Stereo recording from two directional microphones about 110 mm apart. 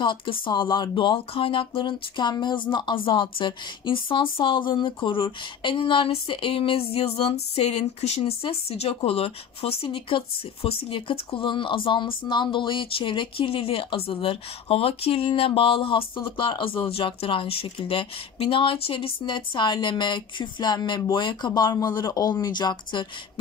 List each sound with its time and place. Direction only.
0.0 s speech: 50° left (ahead or behind)